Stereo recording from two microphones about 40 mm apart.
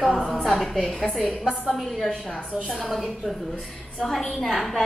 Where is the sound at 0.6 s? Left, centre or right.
Centre.